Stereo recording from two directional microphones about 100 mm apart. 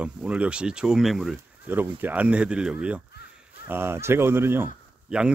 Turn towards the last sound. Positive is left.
turn(degrees=-10)  # may be behind; listen again after turning